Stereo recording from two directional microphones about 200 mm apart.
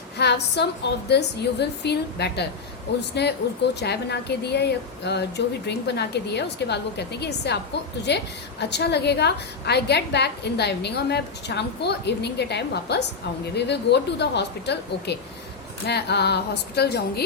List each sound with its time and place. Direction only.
0.2 s a woman's voice: 55° left (ahead or behind)